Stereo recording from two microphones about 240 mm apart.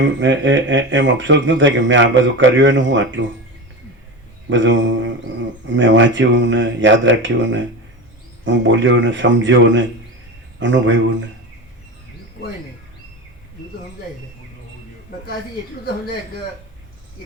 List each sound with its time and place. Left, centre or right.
0.0 s speech: right
4.4 s speech: right